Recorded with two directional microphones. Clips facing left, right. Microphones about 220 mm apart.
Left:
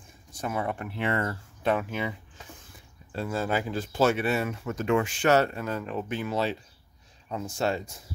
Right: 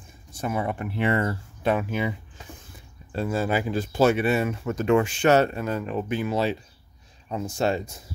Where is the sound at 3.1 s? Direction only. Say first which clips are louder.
Right 4 dB; 20° right (ahead or behind).